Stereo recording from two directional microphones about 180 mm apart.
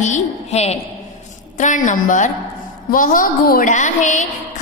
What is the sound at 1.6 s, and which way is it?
A woman's voice, 45° left (ahead or behind).